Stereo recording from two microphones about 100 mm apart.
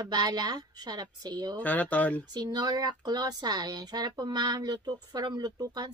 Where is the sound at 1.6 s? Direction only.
15° left (ahead or behind).